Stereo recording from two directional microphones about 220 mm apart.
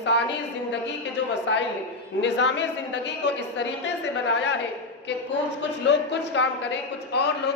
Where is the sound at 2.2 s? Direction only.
55° left (ahead or behind).